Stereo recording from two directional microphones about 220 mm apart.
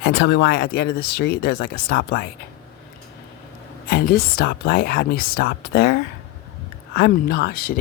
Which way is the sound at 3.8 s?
45° left (ahead or behind).